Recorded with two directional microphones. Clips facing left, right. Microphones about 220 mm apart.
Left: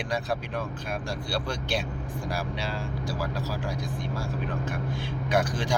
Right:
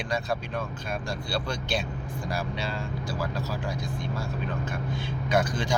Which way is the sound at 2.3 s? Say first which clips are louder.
Right 1 dB; 10° left (ahead or behind).